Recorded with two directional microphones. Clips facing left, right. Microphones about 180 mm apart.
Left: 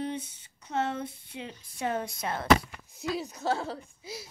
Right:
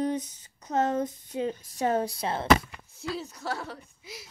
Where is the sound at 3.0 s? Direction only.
15° left (ahead or behind).